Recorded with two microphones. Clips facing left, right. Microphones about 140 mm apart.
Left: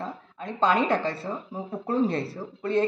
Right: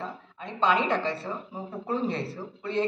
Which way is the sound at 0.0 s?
40° left (ahead or behind).